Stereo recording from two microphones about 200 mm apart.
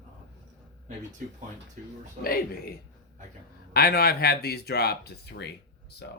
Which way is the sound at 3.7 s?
50° left (ahead or behind).